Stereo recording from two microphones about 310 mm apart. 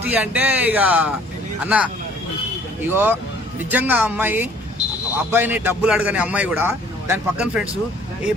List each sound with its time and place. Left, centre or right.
0.1 s a man's voice: centre
2.9 s a man's voice: centre